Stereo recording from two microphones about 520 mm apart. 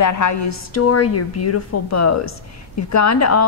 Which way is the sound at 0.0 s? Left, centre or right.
Left.